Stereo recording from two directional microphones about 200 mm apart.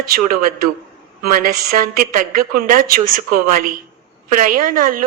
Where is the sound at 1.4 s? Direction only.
45° right (ahead or behind).